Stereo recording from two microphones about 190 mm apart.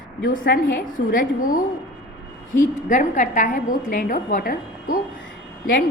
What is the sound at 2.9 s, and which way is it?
A woman's voice, 40° left (ahead or behind).